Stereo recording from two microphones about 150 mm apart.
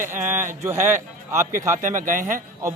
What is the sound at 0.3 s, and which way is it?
Speech, 15° right (ahead or behind).